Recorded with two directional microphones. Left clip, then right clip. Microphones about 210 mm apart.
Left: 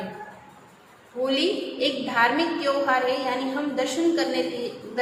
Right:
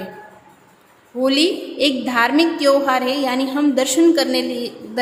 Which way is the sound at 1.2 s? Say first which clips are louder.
Right 7 dB; 60° right (ahead or behind).